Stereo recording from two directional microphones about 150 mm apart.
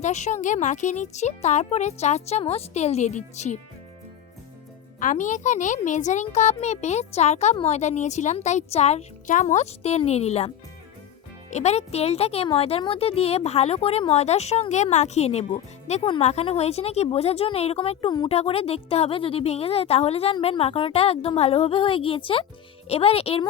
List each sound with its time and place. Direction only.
0.0 s a child's voice: 50° left (ahead or behind)
4.9 s a child's voice: 55° left (ahead or behind)
11.5 s a child's voice: 45° left (ahead or behind)